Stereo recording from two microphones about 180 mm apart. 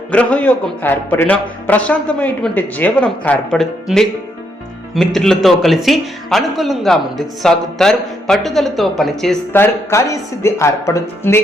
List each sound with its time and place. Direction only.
0.1 s a man's voice: 5° left (ahead or behind)
9.5 s a man's voice: 15° left (ahead or behind)